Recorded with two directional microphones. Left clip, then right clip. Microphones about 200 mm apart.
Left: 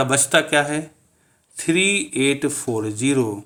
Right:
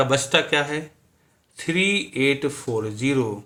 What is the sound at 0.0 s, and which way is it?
Speech, 45° left (ahead or behind).